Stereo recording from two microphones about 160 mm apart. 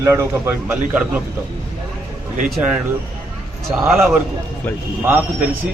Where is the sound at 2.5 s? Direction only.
5° right (ahead or behind).